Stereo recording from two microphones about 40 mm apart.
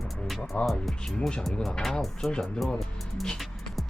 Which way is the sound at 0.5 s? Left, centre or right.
Left.